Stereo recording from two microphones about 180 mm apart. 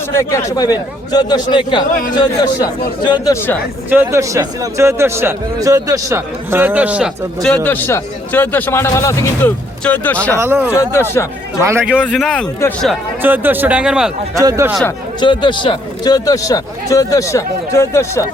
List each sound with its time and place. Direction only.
0.1 s speech: 15° left (ahead or behind)
3.8 s a man's voice: 10° right (ahead or behind)
7.4 s a man's voice: 10° left (ahead or behind)
10.3 s a man's voice: 10° right (ahead or behind)
10.8 s a man's voice: 15° left (ahead or behind)
11.6 s a man's voice: 15° right (ahead or behind)
12.0 s a man's voice: centre (ahead or behind)
13.2 s a man's voice: 10° right (ahead or behind)
14.3 s a man's voice: 20° right (ahead or behind)
15.2 s speech: 25° left (ahead or behind)